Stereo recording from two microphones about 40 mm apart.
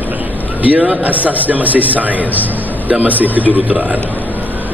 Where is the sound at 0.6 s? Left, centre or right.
Right.